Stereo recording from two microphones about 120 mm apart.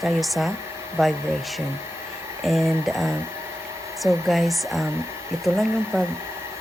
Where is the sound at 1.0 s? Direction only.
20° right (ahead or behind).